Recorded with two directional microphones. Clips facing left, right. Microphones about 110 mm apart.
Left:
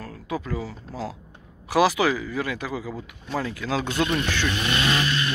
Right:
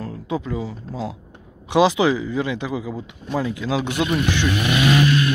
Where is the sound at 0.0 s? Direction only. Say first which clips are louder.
Right 5 dB; 20° right (ahead or behind).